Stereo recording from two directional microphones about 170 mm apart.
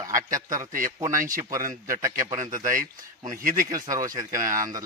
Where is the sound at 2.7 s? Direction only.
50° right (ahead or behind).